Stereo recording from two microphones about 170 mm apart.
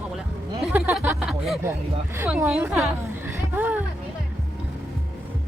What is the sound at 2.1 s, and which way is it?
Speech, 10° right (ahead or behind).